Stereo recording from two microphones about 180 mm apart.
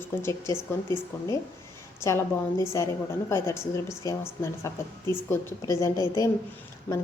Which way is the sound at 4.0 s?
15° left (ahead or behind).